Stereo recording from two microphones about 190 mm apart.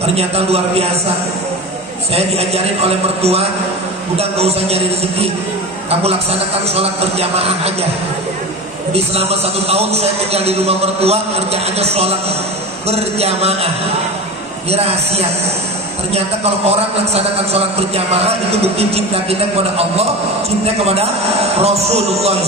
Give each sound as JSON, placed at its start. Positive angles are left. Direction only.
{"t": 0.0, "sound": "a man's voice", "side_deg": -35}
{"t": 2.1, "sound": "a man's voice", "side_deg": -35}
{"t": 5.9, "sound": "a man's voice", "side_deg": -30}
{"t": 8.9, "sound": "a man's voice", "side_deg": -35}
{"t": 14.7, "sound": "a man's voice", "side_deg": -35}